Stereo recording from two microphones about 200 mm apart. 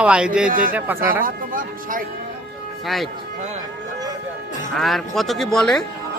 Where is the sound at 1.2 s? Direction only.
45° right (ahead or behind).